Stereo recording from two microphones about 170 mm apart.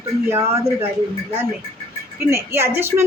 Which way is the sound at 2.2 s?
15° right (ahead or behind).